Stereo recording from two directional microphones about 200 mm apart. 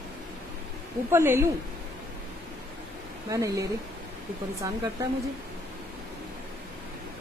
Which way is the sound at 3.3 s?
15° right (ahead or behind).